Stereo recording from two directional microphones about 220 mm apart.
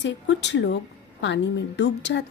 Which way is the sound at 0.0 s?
55° left (ahead or behind).